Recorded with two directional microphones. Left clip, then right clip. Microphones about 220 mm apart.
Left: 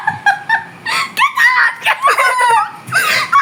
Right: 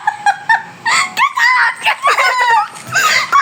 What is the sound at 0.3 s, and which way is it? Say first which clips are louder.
Whimper: right 1 dB; 25° right (ahead or behind).